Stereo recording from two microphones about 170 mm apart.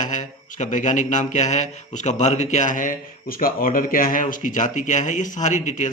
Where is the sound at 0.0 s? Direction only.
45° left (ahead or behind).